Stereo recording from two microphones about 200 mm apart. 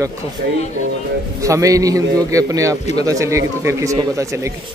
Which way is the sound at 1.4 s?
15° right (ahead or behind).